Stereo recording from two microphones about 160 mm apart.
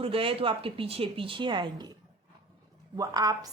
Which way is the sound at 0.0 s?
35° right (ahead or behind).